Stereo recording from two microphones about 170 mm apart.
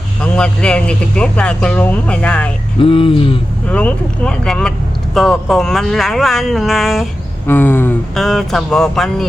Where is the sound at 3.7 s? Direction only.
5° left (ahead or behind).